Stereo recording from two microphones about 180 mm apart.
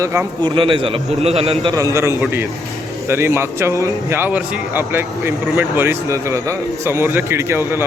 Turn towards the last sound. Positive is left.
turn(degrees=-15)  # may be behind; listen again after turning